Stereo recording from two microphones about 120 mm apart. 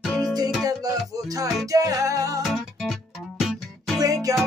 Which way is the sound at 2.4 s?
Centre (ahead or behind).